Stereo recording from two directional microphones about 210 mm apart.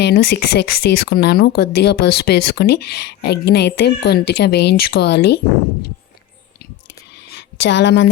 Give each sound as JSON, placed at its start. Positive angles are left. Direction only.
{"t": 0.0, "sound": "speech", "side_deg": 50}
{"t": 7.3, "sound": "speech", "side_deg": 55}